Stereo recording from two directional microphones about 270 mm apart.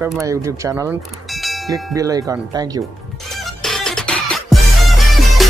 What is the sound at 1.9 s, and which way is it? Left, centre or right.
Speech, centre.